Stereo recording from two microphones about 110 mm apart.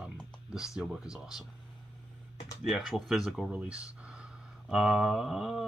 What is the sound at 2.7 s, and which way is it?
Speech, centre (ahead or behind).